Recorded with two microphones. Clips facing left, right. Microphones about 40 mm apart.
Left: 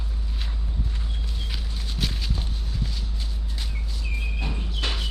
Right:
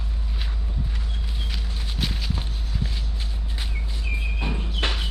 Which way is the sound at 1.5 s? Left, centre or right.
Centre.